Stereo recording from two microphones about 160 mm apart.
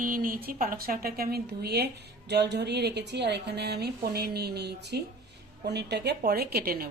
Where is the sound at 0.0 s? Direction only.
60° right (ahead or behind).